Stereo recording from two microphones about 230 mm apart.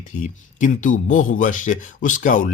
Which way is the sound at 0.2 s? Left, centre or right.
Left.